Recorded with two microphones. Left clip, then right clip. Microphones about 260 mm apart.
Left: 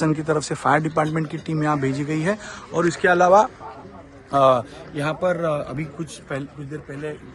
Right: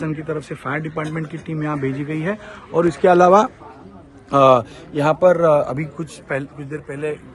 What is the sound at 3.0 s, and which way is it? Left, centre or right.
Speech, right.